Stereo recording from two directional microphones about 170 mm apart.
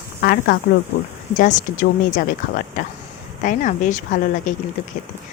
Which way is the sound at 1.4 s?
50° left (ahead or behind).